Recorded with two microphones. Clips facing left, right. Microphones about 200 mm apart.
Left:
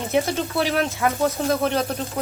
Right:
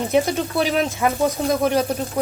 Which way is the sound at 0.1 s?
15° right (ahead or behind).